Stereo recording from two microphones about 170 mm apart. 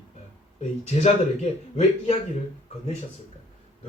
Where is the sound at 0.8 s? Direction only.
40° left (ahead or behind).